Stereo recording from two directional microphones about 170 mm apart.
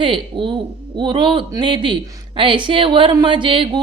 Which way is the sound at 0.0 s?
30° right (ahead or behind).